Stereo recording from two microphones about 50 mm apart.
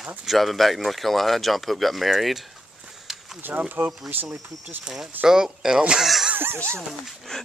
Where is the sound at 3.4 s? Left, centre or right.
Right.